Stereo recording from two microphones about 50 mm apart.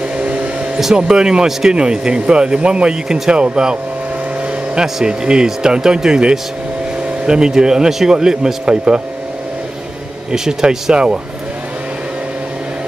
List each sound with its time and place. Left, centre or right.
0.2 s a sound: right
0.9 s speech: centre
4.7 s speech: centre
10.3 s speech: centre